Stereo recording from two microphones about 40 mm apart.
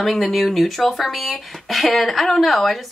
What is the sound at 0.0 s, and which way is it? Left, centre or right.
Speech, centre.